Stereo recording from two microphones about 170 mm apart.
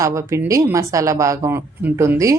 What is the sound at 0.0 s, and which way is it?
Speech, 15° right (ahead or behind).